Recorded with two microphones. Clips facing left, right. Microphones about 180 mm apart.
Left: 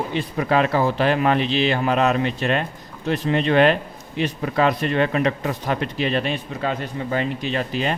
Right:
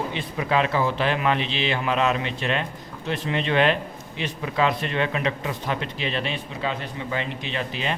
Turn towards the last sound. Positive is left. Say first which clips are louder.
# left 5 dB
turn(degrees=45)  # may be behind; listen again after turning